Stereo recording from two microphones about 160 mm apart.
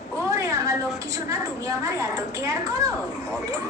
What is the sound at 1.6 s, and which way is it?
Speech, 20° right (ahead or behind).